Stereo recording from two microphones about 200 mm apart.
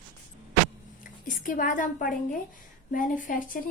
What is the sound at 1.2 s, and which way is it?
A woman's voice, 40° left (ahead or behind).